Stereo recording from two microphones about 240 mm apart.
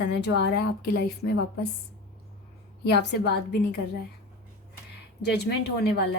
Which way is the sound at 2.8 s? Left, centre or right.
Left.